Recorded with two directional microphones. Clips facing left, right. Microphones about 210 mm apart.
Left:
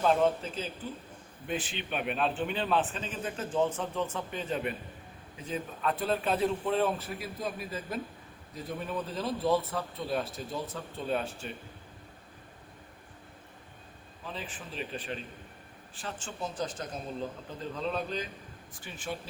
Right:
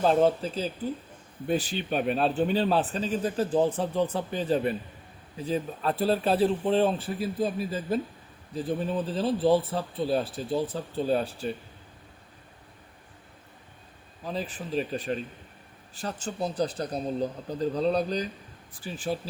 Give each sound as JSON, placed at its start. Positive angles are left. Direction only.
{"t": 0.0, "sound": "speech", "side_deg": -35}
{"t": 14.3, "sound": "speech", "side_deg": -40}